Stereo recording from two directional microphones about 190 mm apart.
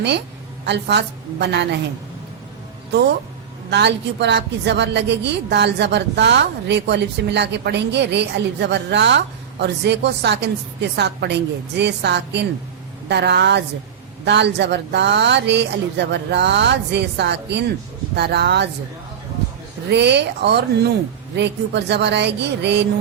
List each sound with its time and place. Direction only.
0.6 s a woman's voice: 60° right (ahead or behind)
3.7 s a woman's voice: 65° right (ahead or behind)
19.9 s a woman's voice: 65° right (ahead or behind)